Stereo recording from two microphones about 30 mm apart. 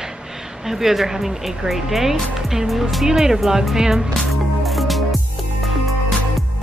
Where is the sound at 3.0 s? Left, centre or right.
Centre.